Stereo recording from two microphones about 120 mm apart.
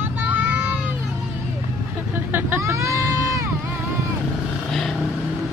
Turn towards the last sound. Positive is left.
turn(degrees=5)  # may be behind; listen again after turning